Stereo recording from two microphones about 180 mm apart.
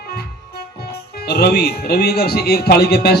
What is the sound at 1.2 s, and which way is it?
Speech, 60° left (ahead or behind).